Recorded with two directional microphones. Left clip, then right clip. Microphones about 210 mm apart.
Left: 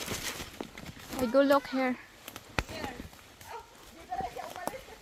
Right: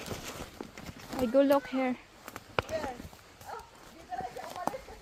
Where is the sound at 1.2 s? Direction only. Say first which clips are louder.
Left 1 dB; 5° left (ahead or behind).